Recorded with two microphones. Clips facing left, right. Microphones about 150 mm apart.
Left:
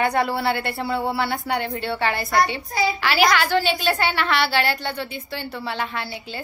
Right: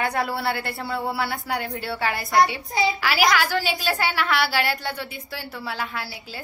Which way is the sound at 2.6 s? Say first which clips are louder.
Even; 20° right (ahead or behind).